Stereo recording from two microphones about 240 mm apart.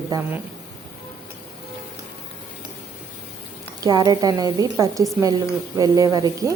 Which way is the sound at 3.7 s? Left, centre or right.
Centre.